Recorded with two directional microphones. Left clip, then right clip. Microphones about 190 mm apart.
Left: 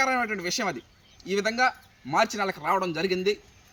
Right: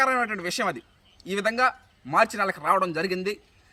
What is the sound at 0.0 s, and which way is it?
A man's voice, 10° right (ahead or behind).